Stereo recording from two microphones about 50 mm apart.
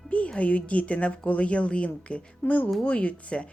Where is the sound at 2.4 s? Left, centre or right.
Left.